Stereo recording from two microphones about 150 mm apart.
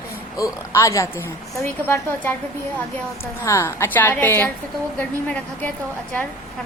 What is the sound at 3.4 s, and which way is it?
A woman's voice, 20° left (ahead or behind).